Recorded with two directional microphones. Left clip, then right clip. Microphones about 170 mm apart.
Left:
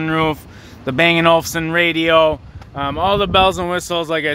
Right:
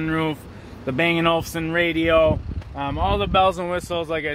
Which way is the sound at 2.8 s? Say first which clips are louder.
Left 6 dB; 55° left (ahead or behind).